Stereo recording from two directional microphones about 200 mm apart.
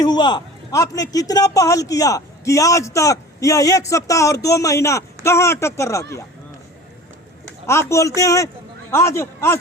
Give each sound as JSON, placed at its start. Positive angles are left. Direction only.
{"t": 0.0, "sound": "a man's voice", "side_deg": 20}
{"t": 7.7, "sound": "a man's voice", "side_deg": 15}